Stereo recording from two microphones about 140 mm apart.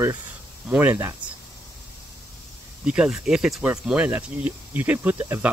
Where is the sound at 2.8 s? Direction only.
5° right (ahead or behind).